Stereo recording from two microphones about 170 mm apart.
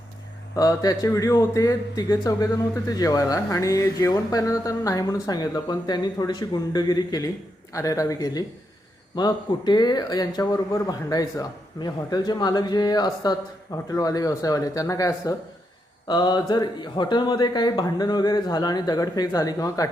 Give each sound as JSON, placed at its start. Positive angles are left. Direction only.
{"t": 0.5, "sound": "a man's voice", "side_deg": 20}